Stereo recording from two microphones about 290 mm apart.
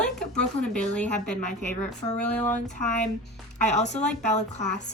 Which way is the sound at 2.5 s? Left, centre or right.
Left.